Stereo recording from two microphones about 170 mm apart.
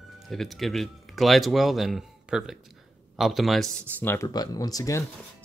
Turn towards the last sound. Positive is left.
turn(degrees=20)  # may be behind; listen again after turning